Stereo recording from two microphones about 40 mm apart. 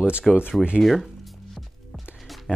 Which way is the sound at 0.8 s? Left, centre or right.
Centre.